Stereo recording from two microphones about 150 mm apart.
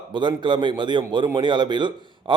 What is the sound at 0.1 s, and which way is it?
A man's voice, 30° right (ahead or behind).